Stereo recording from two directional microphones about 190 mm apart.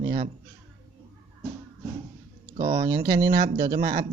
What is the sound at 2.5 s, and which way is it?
Speech, 25° right (ahead or behind).